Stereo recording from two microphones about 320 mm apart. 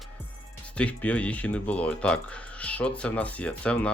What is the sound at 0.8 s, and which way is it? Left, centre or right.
Speech, centre.